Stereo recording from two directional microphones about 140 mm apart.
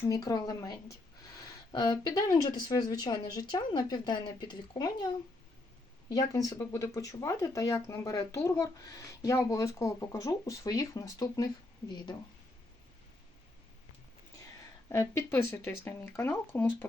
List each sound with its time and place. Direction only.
0.1 s speech: 25° left (ahead or behind)
6.1 s speech: 25° left (ahead or behind)
14.8 s speech: 20° left (ahead or behind)